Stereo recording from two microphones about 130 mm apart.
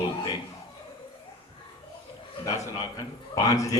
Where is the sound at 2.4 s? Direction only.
25° left (ahead or behind).